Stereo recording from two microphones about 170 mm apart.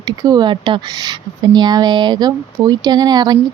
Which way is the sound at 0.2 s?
25° right (ahead or behind).